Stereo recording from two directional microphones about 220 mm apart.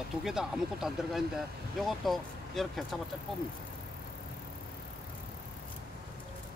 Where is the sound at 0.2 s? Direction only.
Centre (ahead or behind).